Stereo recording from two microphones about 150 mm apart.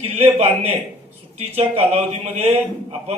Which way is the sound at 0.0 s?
40° right (ahead or behind).